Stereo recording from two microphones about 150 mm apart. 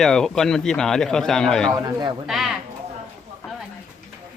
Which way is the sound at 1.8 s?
30° right (ahead or behind).